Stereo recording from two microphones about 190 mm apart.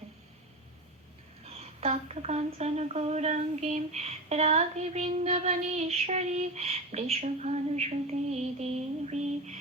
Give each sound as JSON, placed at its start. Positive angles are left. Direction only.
{"t": 1.5, "sound": "speech", "side_deg": -35}